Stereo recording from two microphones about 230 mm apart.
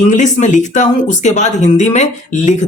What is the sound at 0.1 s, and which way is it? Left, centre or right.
Speech, left.